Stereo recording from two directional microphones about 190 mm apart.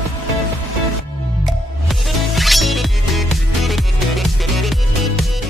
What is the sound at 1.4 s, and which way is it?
Music, centre (ahead or behind).